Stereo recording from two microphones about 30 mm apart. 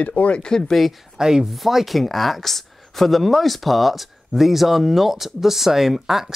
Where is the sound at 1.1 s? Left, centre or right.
Right.